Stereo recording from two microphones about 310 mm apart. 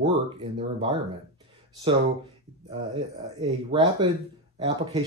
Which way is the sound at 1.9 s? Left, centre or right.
Centre.